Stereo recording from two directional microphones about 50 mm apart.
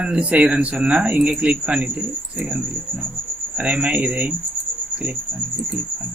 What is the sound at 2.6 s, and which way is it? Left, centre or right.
Speech, right.